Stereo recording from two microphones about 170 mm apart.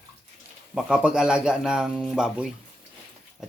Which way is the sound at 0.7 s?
5° right (ahead or behind).